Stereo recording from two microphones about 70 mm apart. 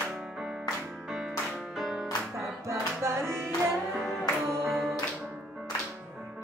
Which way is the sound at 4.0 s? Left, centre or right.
Centre.